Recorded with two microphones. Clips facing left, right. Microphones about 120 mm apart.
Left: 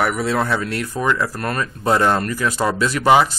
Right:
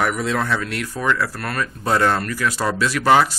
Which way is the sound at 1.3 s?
40° left (ahead or behind).